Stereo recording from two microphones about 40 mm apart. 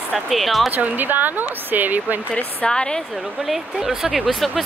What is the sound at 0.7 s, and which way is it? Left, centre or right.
Speech, right.